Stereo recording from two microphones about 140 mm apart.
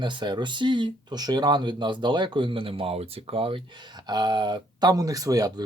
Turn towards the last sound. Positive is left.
turn(degrees=-25)  # may be behind; listen again after turning